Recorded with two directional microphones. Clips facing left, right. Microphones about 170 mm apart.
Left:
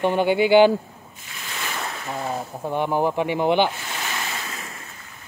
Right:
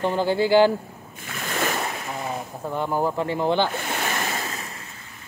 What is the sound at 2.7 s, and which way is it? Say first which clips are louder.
Speech: left 2 dB; 20° left (ahead or behind).